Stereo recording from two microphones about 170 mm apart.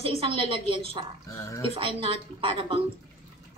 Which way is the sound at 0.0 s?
35° right (ahead or behind).